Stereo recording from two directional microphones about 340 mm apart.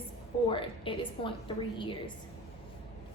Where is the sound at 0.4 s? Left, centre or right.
Centre.